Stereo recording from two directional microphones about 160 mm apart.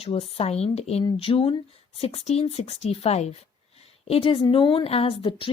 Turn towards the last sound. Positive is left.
turn(degrees=35)  # may be behind; listen again after turning